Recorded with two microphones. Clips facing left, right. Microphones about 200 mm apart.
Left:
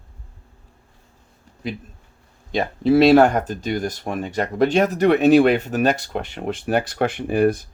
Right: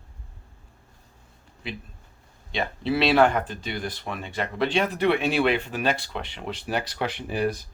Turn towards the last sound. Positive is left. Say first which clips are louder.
# left 8 dB
turn(degrees=50)  # may be behind; listen again after turning